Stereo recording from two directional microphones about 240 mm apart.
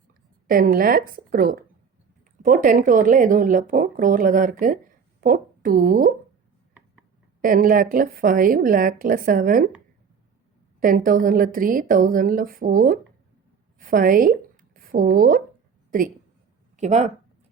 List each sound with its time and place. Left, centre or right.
0.4 s speech: right
7.4 s speech: right
10.8 s speech: right
13.7 s a sound: right
15.9 s speech: right